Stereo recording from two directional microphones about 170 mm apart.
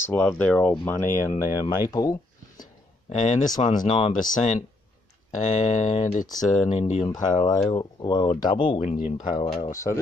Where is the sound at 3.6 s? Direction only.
35° left (ahead or behind).